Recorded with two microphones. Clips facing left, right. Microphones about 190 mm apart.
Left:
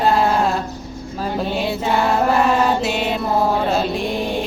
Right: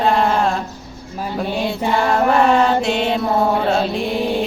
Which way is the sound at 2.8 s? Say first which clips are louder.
Right 2 dB; 5° left (ahead or behind).